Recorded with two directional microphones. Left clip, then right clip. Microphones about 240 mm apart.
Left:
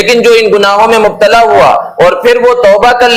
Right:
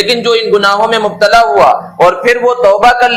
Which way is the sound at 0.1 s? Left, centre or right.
Left.